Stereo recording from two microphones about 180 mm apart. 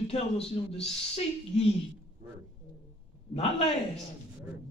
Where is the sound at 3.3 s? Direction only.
35° left (ahead or behind).